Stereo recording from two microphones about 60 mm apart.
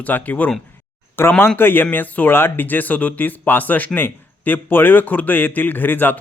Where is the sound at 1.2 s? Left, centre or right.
Left.